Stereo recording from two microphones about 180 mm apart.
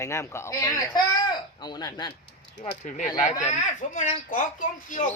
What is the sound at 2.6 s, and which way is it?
Speech, 45° left (ahead or behind).